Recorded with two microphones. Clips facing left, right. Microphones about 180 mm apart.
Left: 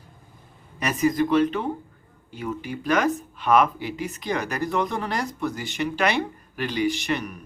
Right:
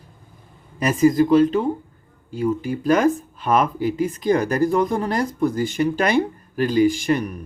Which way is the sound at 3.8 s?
40° right (ahead or behind).